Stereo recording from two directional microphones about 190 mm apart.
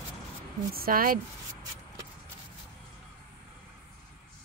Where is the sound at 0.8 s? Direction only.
50° right (ahead or behind).